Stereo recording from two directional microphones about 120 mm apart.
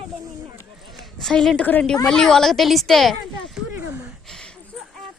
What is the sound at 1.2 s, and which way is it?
A woman's voice, 5° left (ahead or behind).